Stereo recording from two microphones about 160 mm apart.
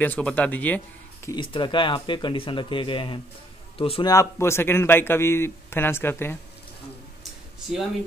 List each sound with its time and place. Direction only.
0.0 s a man's voice: 10° left (ahead or behind)
1.3 s speech: 30° left (ahead or behind)
4.0 s a man's voice: 20° left (ahead or behind)